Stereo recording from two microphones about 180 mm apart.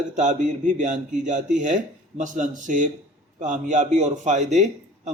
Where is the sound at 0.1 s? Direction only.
45° right (ahead or behind).